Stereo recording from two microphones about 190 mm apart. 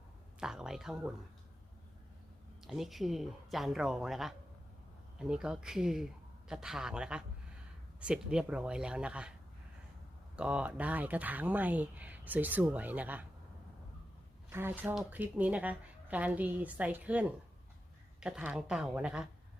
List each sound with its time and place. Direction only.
0.3 s a woman's voice: 5° right (ahead or behind)
2.6 s a woman's voice: centre (ahead or behind)
10.3 s speech: 5° right (ahead or behind)
14.5 s a woman's voice: 10° right (ahead or behind)